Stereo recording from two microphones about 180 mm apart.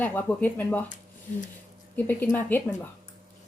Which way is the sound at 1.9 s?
10° left (ahead or behind).